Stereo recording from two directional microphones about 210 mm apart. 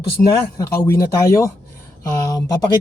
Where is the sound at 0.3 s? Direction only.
15° left (ahead or behind).